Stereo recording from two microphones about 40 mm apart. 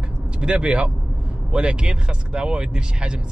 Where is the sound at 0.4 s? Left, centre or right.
Right.